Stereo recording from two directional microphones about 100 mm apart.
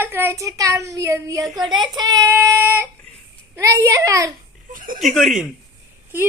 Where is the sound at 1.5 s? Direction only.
45° right (ahead or behind).